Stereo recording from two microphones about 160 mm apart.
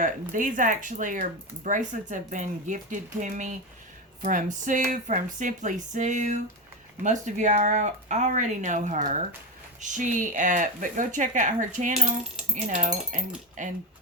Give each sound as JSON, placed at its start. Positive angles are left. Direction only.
{"t": 0.0, "sound": "speech", "side_deg": -55}